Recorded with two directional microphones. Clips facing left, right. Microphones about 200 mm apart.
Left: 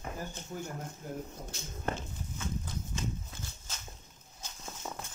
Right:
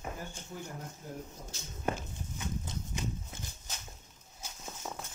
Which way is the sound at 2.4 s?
20° right (ahead or behind).